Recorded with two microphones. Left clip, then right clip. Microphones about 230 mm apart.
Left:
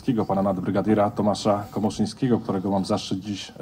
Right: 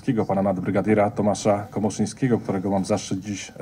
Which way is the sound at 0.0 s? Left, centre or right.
Right.